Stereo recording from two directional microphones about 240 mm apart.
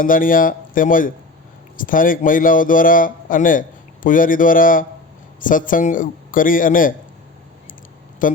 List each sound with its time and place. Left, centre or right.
0.0 s speech: left
8.2 s speech: left